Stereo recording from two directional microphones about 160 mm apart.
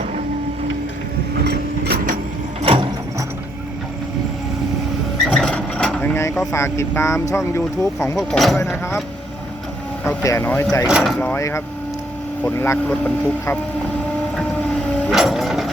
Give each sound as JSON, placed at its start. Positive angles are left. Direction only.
{"t": 1.5, "sound": "a sound", "side_deg": -90}
{"t": 2.6, "sound": "ratchet", "side_deg": -30}
{"t": 5.2, "sound": "a sound", "side_deg": 5}
{"t": 6.5, "sound": "speech", "side_deg": 15}
{"t": 8.1, "sound": "speech", "side_deg": 0}
{"t": 10.0, "sound": "speech", "side_deg": 10}
{"t": 10.8, "sound": "speech", "side_deg": 0}
{"t": 11.3, "sound": "speech", "side_deg": 15}
{"t": 14.3, "sound": "vehicle", "side_deg": 5}
{"t": 15.1, "sound": "a sound", "side_deg": 0}